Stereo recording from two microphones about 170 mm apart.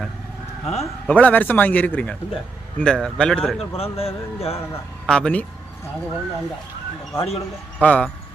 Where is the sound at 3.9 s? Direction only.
35° left (ahead or behind).